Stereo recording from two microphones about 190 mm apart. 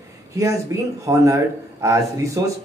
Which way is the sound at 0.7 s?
15° right (ahead or behind).